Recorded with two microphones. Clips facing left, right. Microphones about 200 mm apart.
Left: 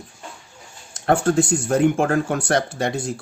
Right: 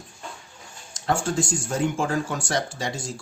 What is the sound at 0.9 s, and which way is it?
Speech, 60° left (ahead or behind).